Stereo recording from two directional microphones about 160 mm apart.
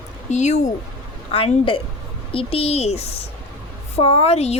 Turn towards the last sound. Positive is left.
turn(degrees=40)  # may be behind; listen again after turning